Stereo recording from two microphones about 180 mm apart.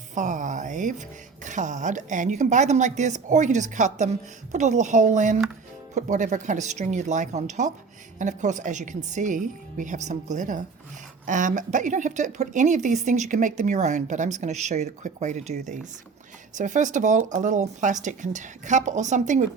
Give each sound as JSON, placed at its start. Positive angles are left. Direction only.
{"t": 0.1, "sound": "a woman's voice", "side_deg": -45}